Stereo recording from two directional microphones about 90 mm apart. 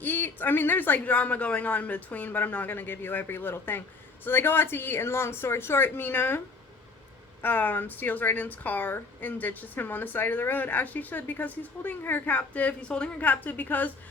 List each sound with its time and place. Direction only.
0.0 s a woman's voice: 20° left (ahead or behind)
7.4 s a woman's voice: 20° left (ahead or behind)